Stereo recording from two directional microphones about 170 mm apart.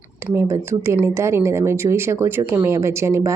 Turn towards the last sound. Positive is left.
turn(degrees=-15)  # may be behind; listen again after turning